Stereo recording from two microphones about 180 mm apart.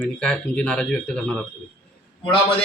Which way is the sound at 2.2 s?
30° left (ahead or behind).